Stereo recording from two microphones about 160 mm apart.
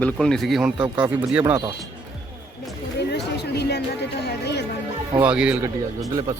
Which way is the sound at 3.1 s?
90° left.